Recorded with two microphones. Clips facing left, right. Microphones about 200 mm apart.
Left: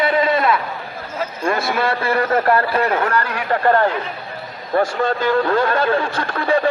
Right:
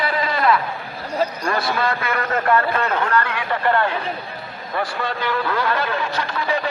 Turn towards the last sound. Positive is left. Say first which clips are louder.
# left 2 dB
turn(degrees=50)  # may be behind; listen again after turning